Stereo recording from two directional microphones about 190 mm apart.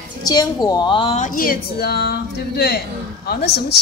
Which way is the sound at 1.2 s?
45° left (ahead or behind).